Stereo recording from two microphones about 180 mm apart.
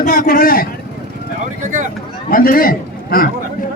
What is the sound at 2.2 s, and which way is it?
A man's voice, 50° left (ahead or behind).